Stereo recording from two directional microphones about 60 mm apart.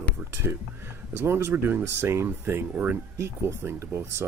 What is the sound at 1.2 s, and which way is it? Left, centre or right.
Speech, right.